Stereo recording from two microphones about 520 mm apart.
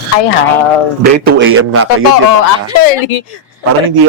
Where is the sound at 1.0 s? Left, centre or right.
Centre.